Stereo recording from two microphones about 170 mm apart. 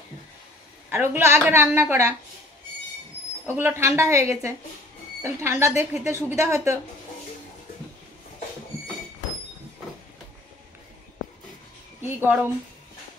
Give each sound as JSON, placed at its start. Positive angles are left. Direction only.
{"t": 0.8, "sound": "a woman's voice", "side_deg": -10}
{"t": 3.4, "sound": "a woman's voice", "side_deg": -15}
{"t": 12.0, "sound": "a woman's voice", "side_deg": -10}